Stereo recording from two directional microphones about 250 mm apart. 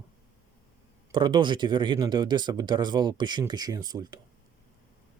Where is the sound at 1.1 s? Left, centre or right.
Centre.